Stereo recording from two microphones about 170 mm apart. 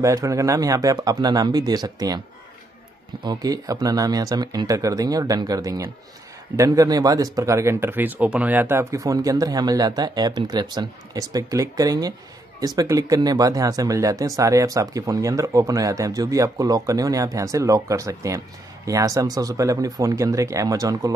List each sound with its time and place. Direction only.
0.0 s speech: 20° right (ahead or behind)
3.3 s speech: 20° right (ahead or behind)